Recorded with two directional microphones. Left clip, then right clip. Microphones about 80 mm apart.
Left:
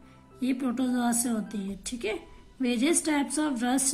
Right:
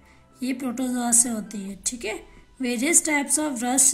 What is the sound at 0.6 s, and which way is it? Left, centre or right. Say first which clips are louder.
A woman's voice: right 2 dB; right.